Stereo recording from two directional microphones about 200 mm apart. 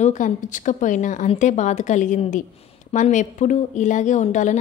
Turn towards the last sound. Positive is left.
turn(degrees=40)  # may be behind; listen again after turning